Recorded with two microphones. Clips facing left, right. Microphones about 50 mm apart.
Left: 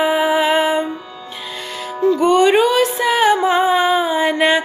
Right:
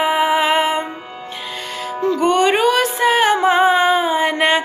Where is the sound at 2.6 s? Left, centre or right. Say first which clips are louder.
Even; right.